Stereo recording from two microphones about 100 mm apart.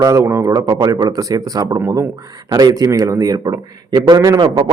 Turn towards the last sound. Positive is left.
turn(degrees=-45)  # may be behind; listen again after turning